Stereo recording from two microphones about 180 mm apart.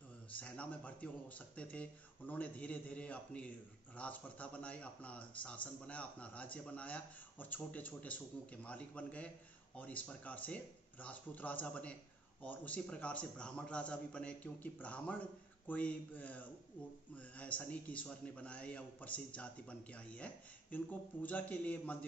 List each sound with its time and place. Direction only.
0.4 s speech: 5° left (ahead or behind)